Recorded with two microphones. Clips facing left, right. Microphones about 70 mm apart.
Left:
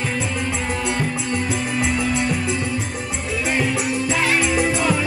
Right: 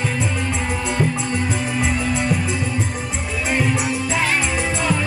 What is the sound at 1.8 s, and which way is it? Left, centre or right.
Music, centre.